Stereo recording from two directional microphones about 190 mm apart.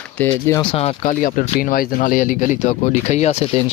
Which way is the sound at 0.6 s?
30° left (ahead or behind).